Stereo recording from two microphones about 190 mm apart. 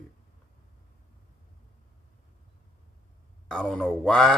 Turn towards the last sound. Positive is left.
turn(degrees=5)  # may be behind; listen again after turning